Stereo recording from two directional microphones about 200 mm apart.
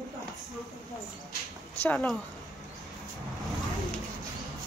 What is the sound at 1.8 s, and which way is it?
Speech, 5° left (ahead or behind).